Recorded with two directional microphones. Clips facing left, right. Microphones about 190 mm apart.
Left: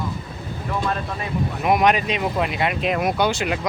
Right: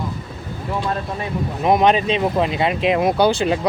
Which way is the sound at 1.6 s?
30° right (ahead or behind).